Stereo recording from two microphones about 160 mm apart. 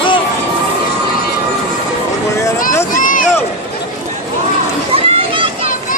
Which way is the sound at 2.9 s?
55° left (ahead or behind).